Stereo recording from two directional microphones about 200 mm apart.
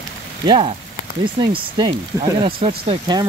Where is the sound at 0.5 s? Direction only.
25° right (ahead or behind).